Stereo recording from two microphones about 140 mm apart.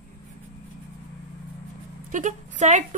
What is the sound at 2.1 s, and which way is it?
Speech, 60° right (ahead or behind).